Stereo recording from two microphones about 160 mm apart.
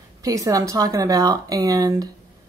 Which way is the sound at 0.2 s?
20° right (ahead or behind).